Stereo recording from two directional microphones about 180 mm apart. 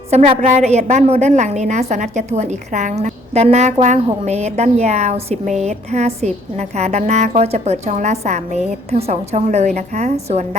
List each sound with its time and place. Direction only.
0.1 s a woman's voice: 40° right (ahead or behind)